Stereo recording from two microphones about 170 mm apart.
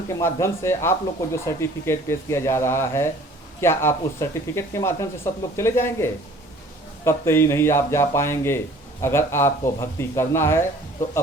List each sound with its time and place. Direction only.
0.1 s speech: 15° left (ahead or behind)